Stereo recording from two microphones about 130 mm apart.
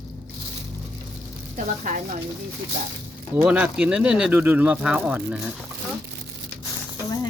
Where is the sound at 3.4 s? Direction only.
10° right (ahead or behind).